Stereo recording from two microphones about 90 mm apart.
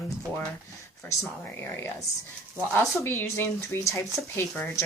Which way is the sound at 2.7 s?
30° left (ahead or behind).